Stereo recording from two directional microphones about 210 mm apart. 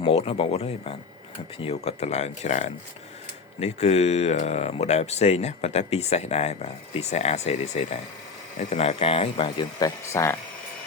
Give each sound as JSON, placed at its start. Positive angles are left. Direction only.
{"t": 0.0, "sound": "speech", "side_deg": 25}